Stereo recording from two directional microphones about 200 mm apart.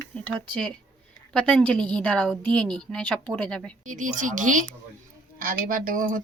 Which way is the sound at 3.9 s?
40° right (ahead or behind).